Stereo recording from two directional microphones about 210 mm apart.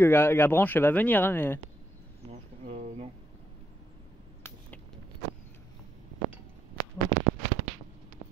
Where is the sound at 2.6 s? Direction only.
35° right (ahead or behind).